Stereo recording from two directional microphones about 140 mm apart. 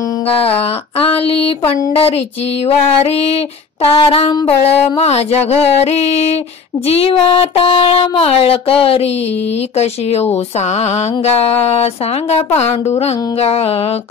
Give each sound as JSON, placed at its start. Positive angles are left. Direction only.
{"t": 0.3, "sound": "speech", "side_deg": 40}